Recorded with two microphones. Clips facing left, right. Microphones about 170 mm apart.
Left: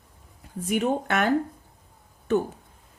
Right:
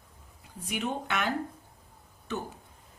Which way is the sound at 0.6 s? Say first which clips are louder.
Left 9 dB; 45° left (ahead or behind).